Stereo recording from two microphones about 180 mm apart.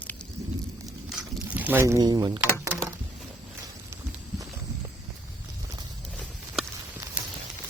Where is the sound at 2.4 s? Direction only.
10° right (ahead or behind).